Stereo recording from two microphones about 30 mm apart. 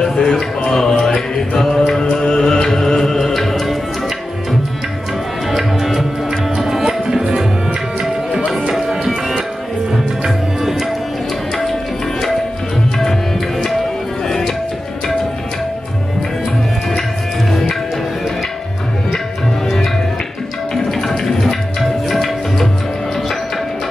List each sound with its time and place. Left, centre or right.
0.0 s music: left; by 3.7 s centre
5.5 s tabla: centre
6.5 s music: centre
8.7 s music: centre
10.2 s tabla: centre
14.2 s music: centre
17.5 s music: centre
20.7 s music: centre
22.1 s music: centre